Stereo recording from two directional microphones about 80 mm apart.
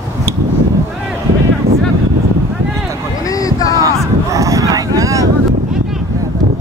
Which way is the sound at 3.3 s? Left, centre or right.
Left.